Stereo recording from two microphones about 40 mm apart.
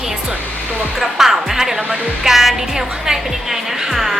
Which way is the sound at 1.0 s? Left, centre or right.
Centre.